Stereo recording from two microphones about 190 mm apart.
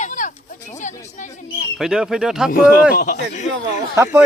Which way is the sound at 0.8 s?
40° left (ahead or behind).